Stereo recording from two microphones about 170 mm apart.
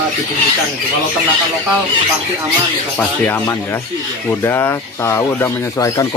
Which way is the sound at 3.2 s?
15° left (ahead or behind).